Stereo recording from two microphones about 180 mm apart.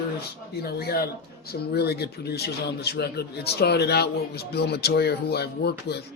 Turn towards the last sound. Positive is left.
turn(degrees=65)  # may be behind; listen again after turning